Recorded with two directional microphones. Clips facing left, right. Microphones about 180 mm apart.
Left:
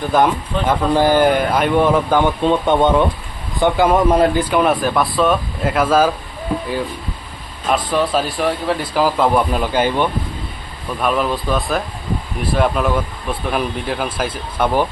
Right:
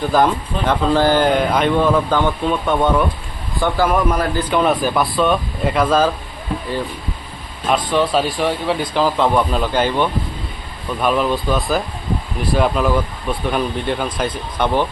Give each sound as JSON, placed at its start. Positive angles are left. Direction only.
{"t": 0.7, "sound": "speech", "side_deg": 10}
{"t": 4.4, "sound": "speech", "side_deg": 10}
{"t": 7.7, "sound": "speech", "side_deg": 0}
{"t": 11.0, "sound": "speech", "side_deg": 0}